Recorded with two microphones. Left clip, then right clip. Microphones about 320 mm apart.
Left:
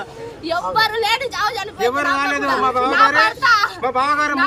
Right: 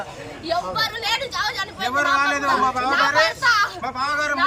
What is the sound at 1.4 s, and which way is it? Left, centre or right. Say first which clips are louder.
Speech: left 5 dB; centre.